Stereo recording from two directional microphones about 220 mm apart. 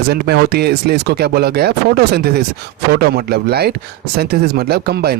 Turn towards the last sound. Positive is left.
turn(degrees=-45)  # may be behind; listen again after turning